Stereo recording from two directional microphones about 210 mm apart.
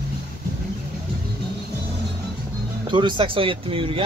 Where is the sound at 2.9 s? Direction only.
20° right (ahead or behind).